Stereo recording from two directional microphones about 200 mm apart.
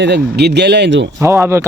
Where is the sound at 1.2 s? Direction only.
15° right (ahead or behind).